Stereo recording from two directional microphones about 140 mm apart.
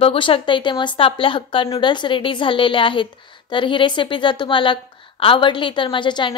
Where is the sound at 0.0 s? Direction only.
40° left (ahead or behind).